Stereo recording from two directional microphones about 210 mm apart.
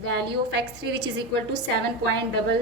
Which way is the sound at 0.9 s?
55° right (ahead or behind).